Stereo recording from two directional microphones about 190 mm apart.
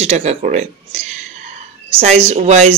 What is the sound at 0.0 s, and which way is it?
Speech, 35° right (ahead or behind).